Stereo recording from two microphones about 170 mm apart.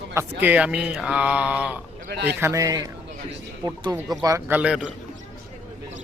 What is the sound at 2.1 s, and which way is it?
Speech, 75° right (ahead or behind).